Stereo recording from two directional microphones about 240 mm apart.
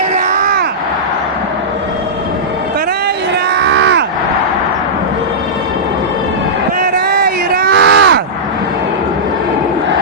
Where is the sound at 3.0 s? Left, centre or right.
Right.